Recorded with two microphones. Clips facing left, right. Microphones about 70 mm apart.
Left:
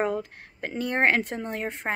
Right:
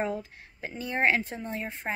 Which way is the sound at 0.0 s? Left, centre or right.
Left.